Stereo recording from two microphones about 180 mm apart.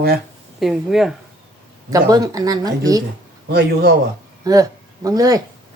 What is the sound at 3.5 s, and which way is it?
Speech, 60° right (ahead or behind).